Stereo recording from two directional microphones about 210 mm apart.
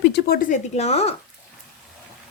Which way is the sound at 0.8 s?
30° left (ahead or behind).